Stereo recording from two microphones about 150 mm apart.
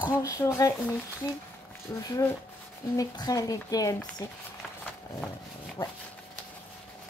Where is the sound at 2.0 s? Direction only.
20° left (ahead or behind).